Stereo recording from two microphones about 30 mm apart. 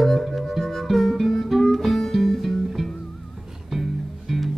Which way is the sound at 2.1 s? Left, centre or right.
Centre.